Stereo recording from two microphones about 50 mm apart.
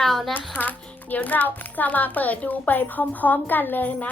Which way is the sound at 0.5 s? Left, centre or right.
Left.